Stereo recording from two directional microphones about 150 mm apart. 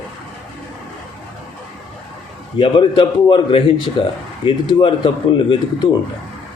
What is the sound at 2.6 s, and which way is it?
A man's voice, 35° left (ahead or behind).